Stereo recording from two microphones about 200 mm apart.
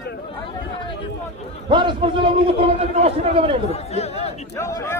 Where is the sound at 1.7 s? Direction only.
25° right (ahead or behind).